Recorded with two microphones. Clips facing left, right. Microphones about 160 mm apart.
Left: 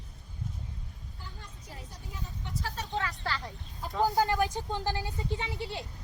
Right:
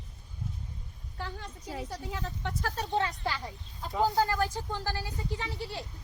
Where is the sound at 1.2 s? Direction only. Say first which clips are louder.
Right 11 dB; 90° right.